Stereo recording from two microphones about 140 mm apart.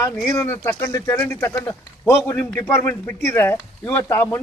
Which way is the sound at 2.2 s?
10° left (ahead or behind).